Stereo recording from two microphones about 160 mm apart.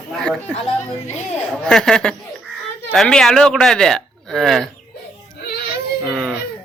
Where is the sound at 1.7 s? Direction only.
5° left (ahead or behind).